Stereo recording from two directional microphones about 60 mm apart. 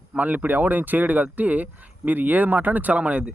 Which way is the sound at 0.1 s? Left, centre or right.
Right.